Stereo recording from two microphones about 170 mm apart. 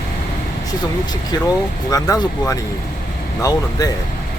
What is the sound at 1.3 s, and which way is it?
Speech, 25° left (ahead or behind).